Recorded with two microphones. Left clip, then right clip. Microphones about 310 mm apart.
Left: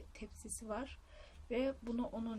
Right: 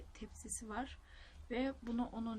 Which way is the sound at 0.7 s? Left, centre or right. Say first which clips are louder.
Left 2 dB; centre.